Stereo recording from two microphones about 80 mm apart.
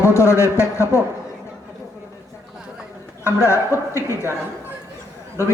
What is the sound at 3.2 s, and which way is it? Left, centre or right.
Speech, left.